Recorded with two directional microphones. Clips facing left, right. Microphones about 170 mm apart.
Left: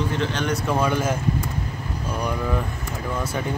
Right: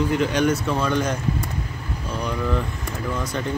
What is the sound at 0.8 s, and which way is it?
Speech, 5° left (ahead or behind).